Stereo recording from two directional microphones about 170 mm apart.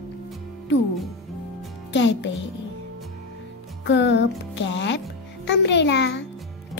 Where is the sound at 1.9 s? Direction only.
90° left.